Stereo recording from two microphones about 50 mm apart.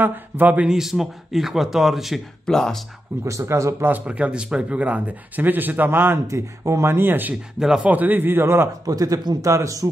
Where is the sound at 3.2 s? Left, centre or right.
Right.